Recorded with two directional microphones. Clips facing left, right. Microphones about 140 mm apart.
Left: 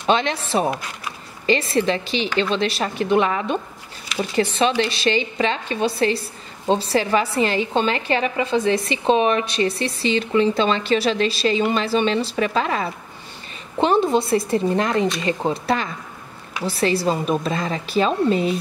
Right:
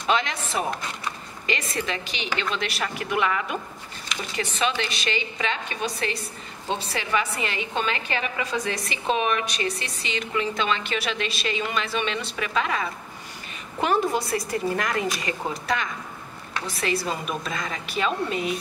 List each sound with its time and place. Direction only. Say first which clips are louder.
0.0 s a woman's voice: left 5 dB; 30° left (ahead or behind)